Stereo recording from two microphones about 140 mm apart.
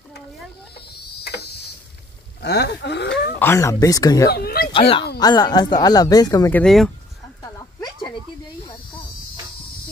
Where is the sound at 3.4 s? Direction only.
20° left (ahead or behind).